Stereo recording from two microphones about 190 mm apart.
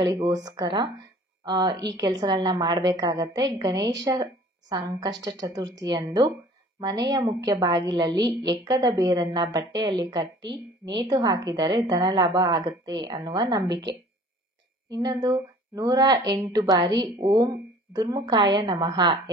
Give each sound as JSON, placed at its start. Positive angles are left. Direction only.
{"t": 0.0, "sound": "a woman's voice", "side_deg": -20}
{"t": 14.9, "sound": "a woman's voice", "side_deg": -20}